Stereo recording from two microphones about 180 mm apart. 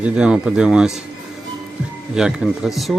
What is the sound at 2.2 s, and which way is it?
Speech, 5° right (ahead or behind).